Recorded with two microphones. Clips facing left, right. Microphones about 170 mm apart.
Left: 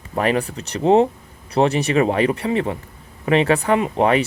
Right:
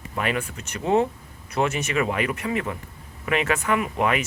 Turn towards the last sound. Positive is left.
turn(degrees=30)  # may be behind; listen again after turning